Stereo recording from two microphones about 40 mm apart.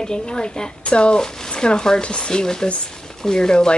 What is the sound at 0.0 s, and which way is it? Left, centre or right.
A woman's voice, left.